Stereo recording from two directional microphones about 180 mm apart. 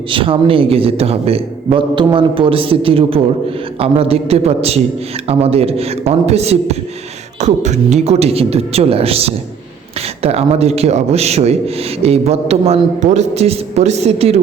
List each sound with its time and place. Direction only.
0.1 s a man's voice: 30° right (ahead or behind)